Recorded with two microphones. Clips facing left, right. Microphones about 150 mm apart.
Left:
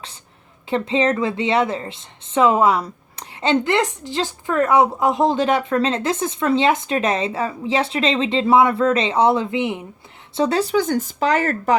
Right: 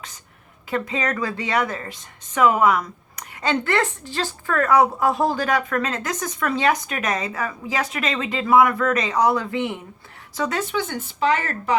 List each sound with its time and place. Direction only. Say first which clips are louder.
0.7 s a woman's voice: left 6 dB; 25° left (ahead or behind)
10.3 s speech: left 6 dB; 30° left (ahead or behind)